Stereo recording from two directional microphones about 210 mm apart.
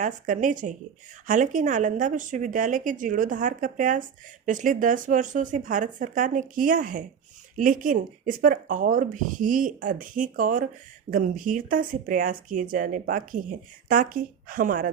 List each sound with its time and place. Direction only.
0.0 s speech: 35° right (ahead or behind)